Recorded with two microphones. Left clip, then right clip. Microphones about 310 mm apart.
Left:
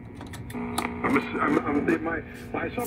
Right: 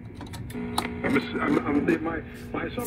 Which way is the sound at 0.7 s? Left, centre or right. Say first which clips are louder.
Left 1 dB; centre.